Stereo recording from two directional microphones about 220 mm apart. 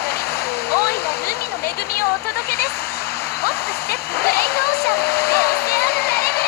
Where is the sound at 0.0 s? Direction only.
45° left (ahead or behind).